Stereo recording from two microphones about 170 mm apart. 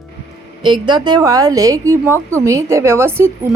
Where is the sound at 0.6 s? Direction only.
25° right (ahead or behind).